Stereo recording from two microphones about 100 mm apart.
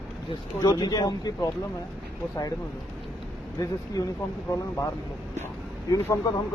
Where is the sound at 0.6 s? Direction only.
40° left (ahead or behind).